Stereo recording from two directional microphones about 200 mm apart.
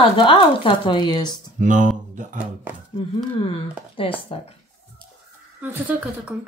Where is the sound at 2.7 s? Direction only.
10° right (ahead or behind).